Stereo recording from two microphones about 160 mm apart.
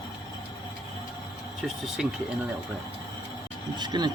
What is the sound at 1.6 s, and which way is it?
Speech, 5° right (ahead or behind).